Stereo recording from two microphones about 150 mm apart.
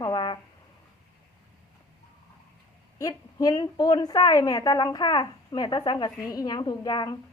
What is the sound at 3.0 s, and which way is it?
A woman's voice, 25° left (ahead or behind).